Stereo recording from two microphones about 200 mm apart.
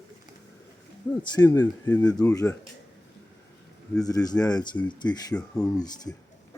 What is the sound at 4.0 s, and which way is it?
Speech, 20° left (ahead or behind).